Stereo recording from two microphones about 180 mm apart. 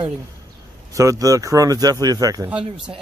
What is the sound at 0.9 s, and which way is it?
Speech, 20° right (ahead or behind).